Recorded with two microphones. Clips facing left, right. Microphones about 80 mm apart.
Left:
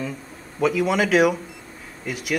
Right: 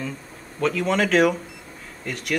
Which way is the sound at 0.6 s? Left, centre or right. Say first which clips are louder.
Left 2 dB; centre.